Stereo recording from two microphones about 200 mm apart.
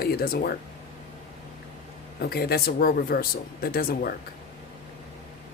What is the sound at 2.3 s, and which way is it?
A man's voice, 50° left (ahead or behind).